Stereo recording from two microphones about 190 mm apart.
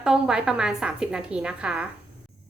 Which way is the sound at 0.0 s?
5° right (ahead or behind).